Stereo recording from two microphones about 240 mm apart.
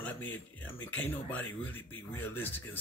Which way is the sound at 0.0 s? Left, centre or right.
Centre.